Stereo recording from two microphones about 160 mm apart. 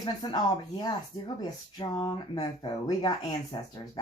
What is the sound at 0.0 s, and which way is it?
A woman's voice, 25° left (ahead or behind).